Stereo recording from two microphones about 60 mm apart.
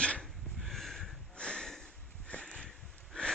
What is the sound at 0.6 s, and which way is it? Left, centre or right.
Sniff, centre.